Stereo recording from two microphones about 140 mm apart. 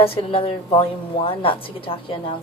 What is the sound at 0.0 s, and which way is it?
A woman's voice, 40° left (ahead or behind).